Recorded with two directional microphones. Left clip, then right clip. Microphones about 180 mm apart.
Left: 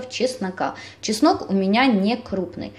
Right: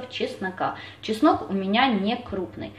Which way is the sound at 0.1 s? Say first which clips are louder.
Left 5 dB; 50° left (ahead or behind).